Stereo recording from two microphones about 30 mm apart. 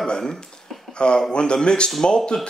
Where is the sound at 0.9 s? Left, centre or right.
Left.